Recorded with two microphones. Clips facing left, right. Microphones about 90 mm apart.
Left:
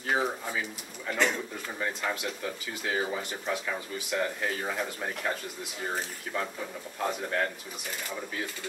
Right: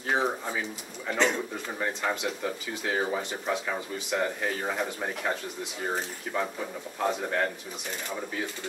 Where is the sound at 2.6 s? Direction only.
Centre (ahead or behind).